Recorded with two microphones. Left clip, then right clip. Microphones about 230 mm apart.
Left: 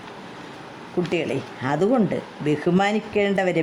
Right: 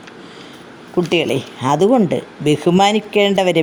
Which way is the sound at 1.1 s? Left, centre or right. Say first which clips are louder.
Right 9 dB; right.